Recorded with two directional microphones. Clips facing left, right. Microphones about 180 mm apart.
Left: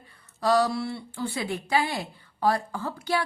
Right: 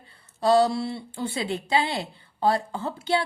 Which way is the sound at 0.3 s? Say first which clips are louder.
Right 3 dB; 25° right (ahead or behind).